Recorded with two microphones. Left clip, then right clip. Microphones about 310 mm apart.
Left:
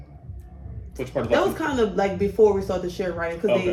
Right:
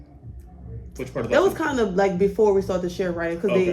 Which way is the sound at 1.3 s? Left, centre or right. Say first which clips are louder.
Right 2 dB; right.